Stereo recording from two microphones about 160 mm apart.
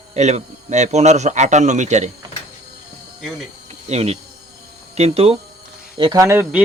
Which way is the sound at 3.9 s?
40° right (ahead or behind).